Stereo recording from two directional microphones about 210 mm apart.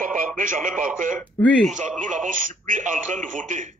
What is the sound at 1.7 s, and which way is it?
Speech, 35° right (ahead or behind).